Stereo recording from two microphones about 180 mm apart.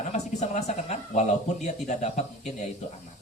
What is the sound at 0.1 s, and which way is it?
A man's voice, 40° left (ahead or behind).